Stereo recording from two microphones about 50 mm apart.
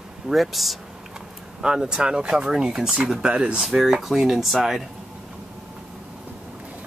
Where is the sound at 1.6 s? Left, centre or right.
Centre.